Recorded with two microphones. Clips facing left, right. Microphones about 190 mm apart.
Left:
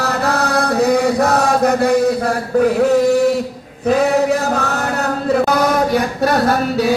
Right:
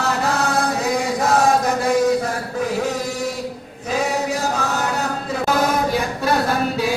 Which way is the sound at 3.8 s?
60° left (ahead or behind).